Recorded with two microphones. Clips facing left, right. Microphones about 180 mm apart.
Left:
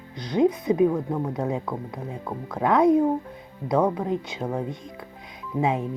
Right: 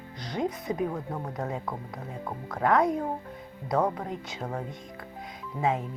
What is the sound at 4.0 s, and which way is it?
Speech, 20° left (ahead or behind).